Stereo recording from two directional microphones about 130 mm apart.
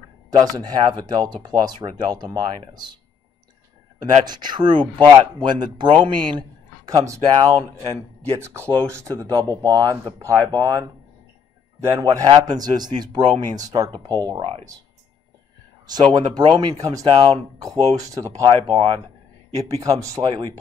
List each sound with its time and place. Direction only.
0.3 s speech: 30° right (ahead or behind)
4.0 s speech: 35° right (ahead or behind)
15.9 s speech: 35° right (ahead or behind)